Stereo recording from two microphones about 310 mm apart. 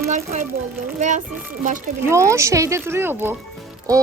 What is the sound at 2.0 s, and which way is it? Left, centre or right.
Speech, centre.